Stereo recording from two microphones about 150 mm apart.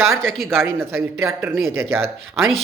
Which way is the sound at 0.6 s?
15° right (ahead or behind).